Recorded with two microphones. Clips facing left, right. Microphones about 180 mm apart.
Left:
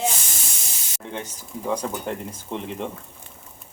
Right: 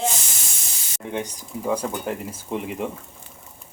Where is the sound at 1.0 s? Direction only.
10° right (ahead or behind).